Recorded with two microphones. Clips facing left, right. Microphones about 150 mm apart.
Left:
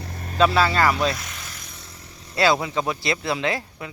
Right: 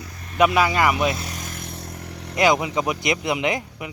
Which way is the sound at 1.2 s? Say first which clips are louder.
Right 6 dB; 40° right (ahead or behind).